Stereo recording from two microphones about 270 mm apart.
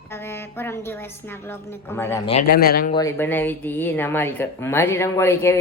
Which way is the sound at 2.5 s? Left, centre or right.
Left.